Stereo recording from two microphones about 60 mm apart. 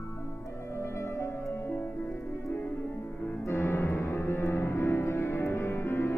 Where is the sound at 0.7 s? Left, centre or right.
Left.